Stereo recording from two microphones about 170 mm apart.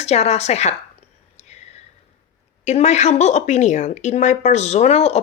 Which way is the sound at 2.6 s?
40° left (ahead or behind).